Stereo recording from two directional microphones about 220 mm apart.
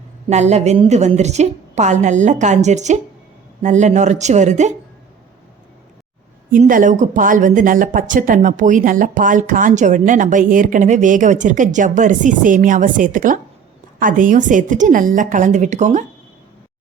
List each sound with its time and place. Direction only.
0.3 s speech: 30° right (ahead or behind)
6.5 s speech: 40° right (ahead or behind)